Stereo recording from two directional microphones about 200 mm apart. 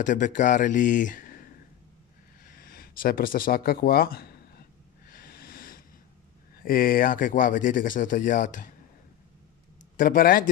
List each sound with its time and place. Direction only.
0.0 s speech: 40° left (ahead or behind)
2.4 s a sound: 45° left (ahead or behind)
6.6 s speech: 45° left (ahead or behind)
9.9 s speech: 45° left (ahead or behind)